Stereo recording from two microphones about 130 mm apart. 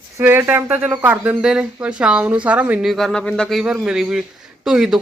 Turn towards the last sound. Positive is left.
turn(degrees=-5)  # may be behind; listen again after turning